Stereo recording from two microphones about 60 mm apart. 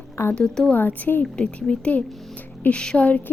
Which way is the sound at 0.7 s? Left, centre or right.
Left.